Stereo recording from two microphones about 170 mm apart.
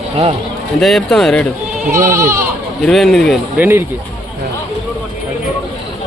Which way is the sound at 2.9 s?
Centre (ahead or behind).